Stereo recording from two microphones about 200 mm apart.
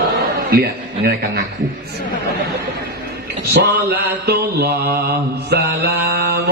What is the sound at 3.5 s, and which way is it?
Mantra, 50° right (ahead or behind).